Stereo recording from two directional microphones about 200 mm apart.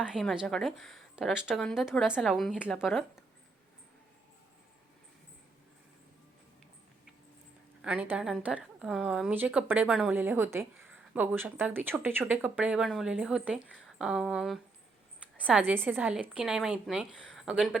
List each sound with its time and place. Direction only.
0.0 s speech: centre (ahead or behind)
7.8 s speech: 5° right (ahead or behind)